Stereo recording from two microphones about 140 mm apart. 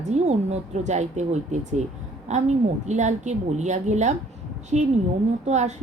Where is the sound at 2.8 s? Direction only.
55° right (ahead or behind).